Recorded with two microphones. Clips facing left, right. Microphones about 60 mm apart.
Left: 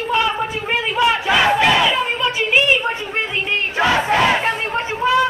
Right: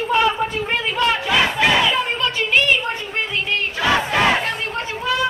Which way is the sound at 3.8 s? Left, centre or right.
Left.